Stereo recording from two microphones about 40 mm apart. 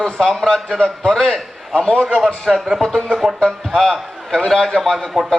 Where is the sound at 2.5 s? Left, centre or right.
Centre.